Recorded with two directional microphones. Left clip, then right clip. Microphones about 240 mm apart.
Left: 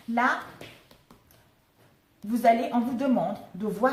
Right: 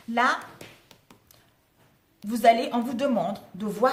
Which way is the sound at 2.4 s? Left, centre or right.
Right.